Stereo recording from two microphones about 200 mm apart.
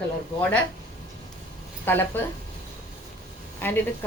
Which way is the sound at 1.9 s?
10° left (ahead or behind).